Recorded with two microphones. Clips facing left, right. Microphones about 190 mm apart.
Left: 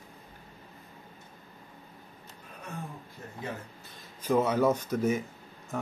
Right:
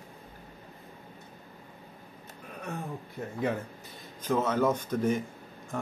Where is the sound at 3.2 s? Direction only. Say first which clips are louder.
Right 10 dB; 55° right (ahead or behind).